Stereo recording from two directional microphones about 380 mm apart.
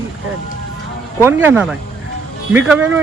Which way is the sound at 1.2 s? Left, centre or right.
Centre.